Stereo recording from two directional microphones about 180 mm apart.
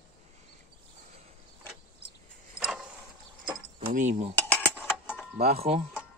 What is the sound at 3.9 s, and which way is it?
Speech, 40° right (ahead or behind).